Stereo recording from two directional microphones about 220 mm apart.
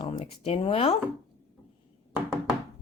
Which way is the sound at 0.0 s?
25° left (ahead or behind).